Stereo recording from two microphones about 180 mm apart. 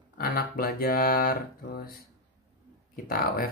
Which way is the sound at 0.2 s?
55° left (ahead or behind).